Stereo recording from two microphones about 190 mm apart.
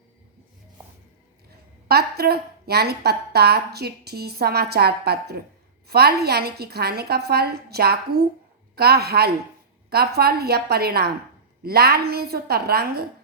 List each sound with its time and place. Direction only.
1.9 s a woman's voice: 55° right (ahead or behind)